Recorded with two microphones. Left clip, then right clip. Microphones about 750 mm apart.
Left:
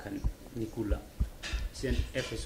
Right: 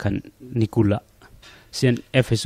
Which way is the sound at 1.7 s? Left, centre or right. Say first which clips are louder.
Right 17 dB; right.